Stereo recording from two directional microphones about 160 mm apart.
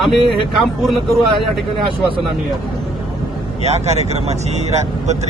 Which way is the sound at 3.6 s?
45° right (ahead or behind).